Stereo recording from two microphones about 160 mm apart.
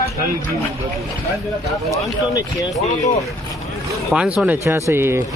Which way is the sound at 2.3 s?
20° left (ahead or behind).